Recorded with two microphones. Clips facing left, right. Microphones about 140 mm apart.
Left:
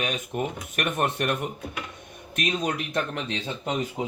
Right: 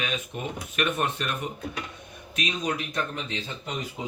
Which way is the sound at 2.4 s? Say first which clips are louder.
Left 2 dB; 55° left (ahead or behind).